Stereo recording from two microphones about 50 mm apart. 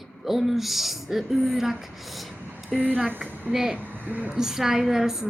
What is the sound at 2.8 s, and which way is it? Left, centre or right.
Speech, right.